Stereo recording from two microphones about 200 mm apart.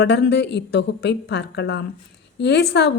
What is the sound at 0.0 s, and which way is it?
A woman's voice, 60° left (ahead or behind).